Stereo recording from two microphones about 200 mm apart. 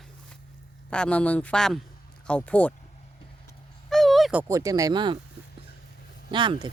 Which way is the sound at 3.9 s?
Centre (ahead or behind).